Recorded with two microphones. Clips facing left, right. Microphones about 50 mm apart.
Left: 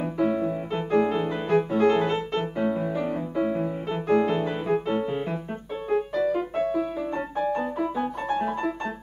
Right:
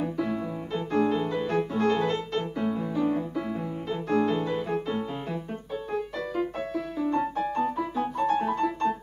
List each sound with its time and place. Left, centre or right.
0.0 s music: centre
6.1 s music: centre